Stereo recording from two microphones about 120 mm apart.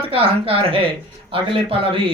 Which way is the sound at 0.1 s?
50° right (ahead or behind).